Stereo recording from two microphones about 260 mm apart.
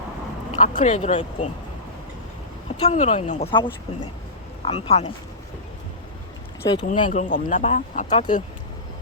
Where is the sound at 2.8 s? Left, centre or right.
Left.